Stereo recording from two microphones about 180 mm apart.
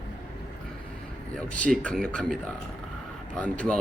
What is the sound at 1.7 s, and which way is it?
Speech, 5° left (ahead or behind).